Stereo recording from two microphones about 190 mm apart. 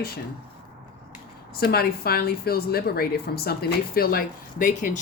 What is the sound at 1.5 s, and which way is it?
A woman's voice, 55° left (ahead or behind).